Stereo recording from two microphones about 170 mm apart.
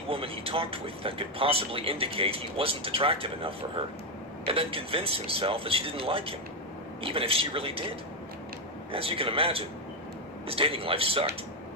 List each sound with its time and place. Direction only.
0.1 s speech: 35° right (ahead or behind)
8.9 s speech: 35° right (ahead or behind)